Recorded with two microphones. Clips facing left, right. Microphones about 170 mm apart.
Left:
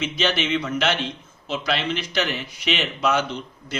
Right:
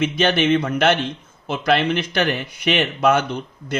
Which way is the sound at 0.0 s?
55° right (ahead or behind).